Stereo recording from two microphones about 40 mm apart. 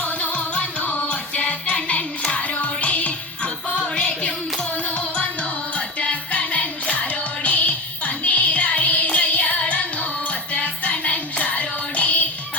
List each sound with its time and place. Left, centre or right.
0.0 s music: left